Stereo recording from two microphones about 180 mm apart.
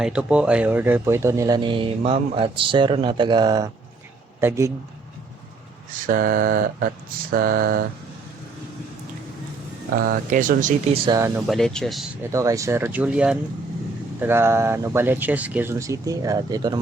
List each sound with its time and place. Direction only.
0.0 s speech: 5° right (ahead or behind)
5.9 s a sound: 50° right (ahead or behind)
10.1 s a sound: 45° right (ahead or behind)
10.9 s speech: 30° right (ahead or behind)
11.4 s speech: centre (ahead or behind)
12.3 s speech: 15° right (ahead or behind)